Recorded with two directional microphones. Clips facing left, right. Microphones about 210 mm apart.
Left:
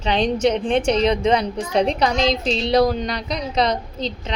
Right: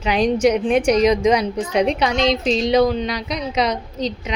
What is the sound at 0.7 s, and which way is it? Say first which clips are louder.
Speech: right 3 dB; 30° left (ahead or behind).